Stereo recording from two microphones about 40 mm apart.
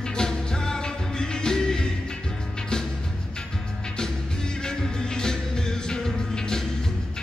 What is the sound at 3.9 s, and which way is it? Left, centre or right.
Music, centre.